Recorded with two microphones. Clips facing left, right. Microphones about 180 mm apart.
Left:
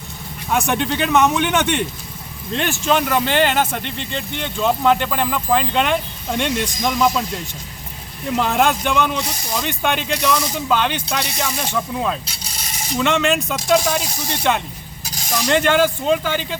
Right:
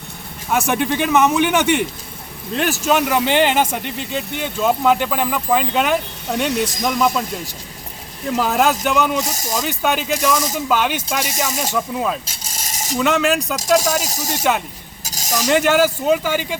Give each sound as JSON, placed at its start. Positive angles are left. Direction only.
{"t": 0.5, "sound": "speech", "side_deg": -5}
{"t": 9.1, "sound": "speech", "side_deg": -45}
{"t": 9.6, "sound": "speech", "side_deg": -5}
{"t": 11.3, "sound": "speech", "side_deg": -45}
{"t": 11.7, "sound": "speech", "side_deg": -5}
{"t": 12.2, "sound": "a sound", "side_deg": -45}
{"t": 13.0, "sound": "speech", "side_deg": 0}
{"t": 14.0, "sound": "speech", "side_deg": -40}
{"t": 15.0, "sound": "a sound", "side_deg": -40}
{"t": 15.4, "sound": "speech", "side_deg": -5}